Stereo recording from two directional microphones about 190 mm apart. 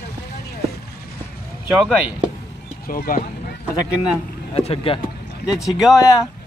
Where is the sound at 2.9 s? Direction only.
50° left (ahead or behind).